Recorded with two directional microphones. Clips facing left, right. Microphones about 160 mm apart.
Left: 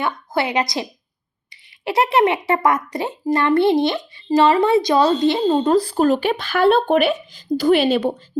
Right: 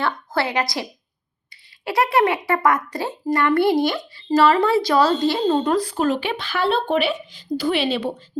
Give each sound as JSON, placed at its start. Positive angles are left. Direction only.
{"t": 0.0, "sound": "speech", "side_deg": 20}
{"t": 5.7, "sound": "speech", "side_deg": 30}